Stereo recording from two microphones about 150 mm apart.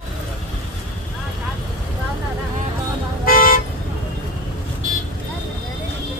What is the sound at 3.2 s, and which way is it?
Toot, 70° left (ahead or behind).